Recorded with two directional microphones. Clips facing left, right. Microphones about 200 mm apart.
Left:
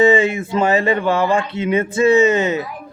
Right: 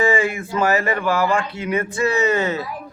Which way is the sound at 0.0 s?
20° left (ahead or behind).